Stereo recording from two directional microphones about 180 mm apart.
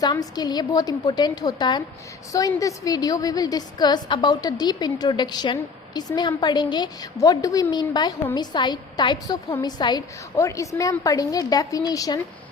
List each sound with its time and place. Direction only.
0.0 s a woman's voice: 20° left (ahead or behind)